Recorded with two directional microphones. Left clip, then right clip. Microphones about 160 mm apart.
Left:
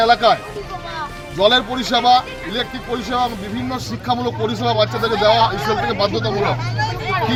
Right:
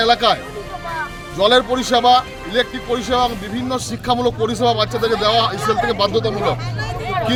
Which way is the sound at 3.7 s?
15° right (ahead or behind).